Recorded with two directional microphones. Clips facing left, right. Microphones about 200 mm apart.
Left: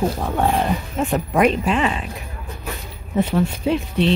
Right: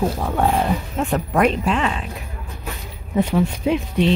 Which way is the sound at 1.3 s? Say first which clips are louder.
Left 1 dB; 5° left (ahead or behind).